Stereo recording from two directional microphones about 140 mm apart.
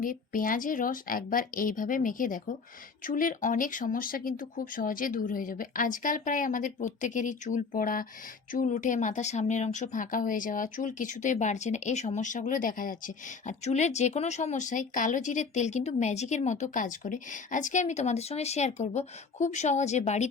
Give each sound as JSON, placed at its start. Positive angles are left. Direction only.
{"t": 0.0, "sound": "speech", "side_deg": 80}
{"t": 8.5, "sound": "speech", "side_deg": 65}